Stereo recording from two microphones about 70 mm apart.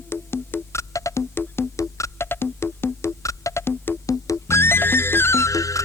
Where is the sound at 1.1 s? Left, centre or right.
Left.